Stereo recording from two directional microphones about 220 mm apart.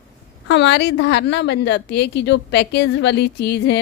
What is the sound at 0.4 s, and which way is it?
A woman's voice, 55° left (ahead or behind).